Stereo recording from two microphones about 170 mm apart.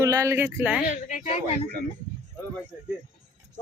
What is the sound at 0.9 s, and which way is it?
Speech, 45° left (ahead or behind).